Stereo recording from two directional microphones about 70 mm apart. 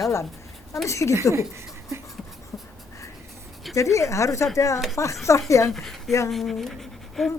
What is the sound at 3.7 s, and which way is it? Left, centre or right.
A woman's voice, left.